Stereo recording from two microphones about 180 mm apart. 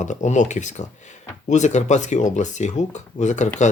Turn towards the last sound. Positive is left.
turn(degrees=40)  # may be behind; listen again after turning